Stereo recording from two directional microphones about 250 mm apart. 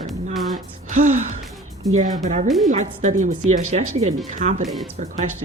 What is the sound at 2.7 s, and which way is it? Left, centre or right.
Speech, right.